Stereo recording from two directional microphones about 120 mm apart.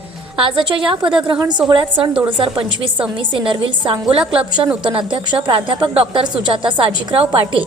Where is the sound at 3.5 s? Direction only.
45° right (ahead or behind).